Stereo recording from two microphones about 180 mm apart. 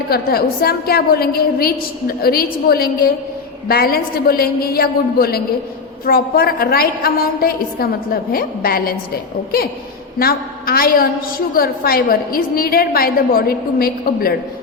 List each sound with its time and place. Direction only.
0.1 s a woman's voice: 55° left (ahead or behind)
10.2 s a woman's voice: 55° left (ahead or behind)